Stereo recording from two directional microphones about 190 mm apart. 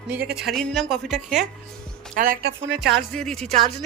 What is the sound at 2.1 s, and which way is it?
Speech, 50° right (ahead or behind).